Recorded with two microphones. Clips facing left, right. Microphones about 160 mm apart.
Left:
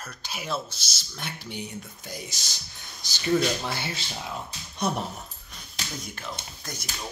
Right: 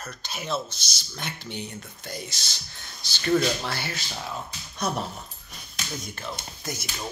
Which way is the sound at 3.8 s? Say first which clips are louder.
Even; 20° left (ahead or behind).